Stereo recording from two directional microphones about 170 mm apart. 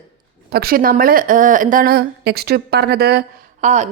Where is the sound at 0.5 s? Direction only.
60° right (ahead or behind).